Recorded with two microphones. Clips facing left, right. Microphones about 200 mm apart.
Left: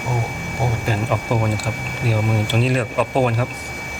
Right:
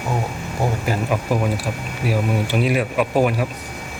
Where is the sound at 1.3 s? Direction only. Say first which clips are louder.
Even; 10° right (ahead or behind).